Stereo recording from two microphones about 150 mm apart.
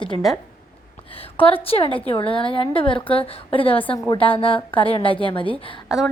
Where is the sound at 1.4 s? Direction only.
40° left (ahead or behind).